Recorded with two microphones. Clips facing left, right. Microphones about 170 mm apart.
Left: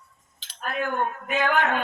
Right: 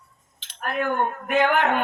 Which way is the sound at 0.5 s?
60° right (ahead or behind).